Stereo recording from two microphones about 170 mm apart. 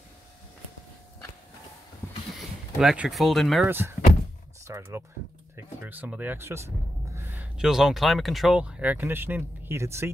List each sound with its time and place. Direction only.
2.3 s speech: centre (ahead or behind)
3.6 s speech: 10° right (ahead or behind)